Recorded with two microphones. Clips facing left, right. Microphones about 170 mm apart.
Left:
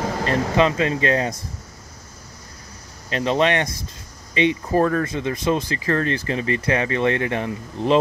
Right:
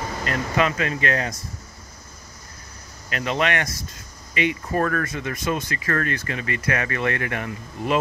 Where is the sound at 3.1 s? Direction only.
30° left (ahead or behind).